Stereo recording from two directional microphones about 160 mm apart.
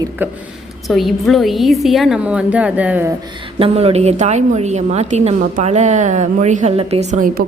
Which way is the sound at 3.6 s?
40° right (ahead or behind).